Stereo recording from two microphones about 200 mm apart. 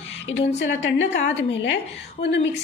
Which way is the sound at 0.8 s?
60° left (ahead or behind).